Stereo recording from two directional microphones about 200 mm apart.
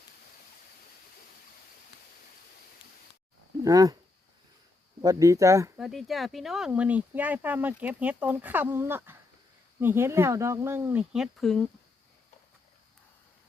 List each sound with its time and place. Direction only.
3.6 s speech: 15° right (ahead or behind)
5.0 s speech: 15° right (ahead or behind)
5.8 s speech: centre (ahead or behind)